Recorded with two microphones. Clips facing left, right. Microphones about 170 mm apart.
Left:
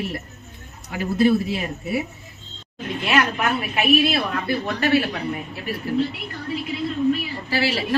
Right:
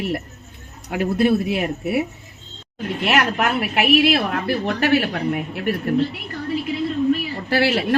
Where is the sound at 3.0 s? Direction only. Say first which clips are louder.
Right 1 dB; 85° right.